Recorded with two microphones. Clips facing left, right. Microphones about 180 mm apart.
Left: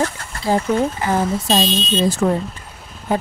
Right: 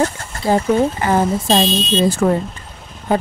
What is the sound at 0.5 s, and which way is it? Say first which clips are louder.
Speech: right 2 dB; 65° right (ahead or behind).